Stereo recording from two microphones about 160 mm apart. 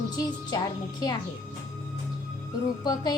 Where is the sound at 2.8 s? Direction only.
25° left (ahead or behind).